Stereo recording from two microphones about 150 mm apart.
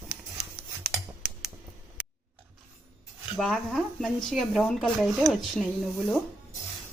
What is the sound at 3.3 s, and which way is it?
Speech, centre (ahead or behind).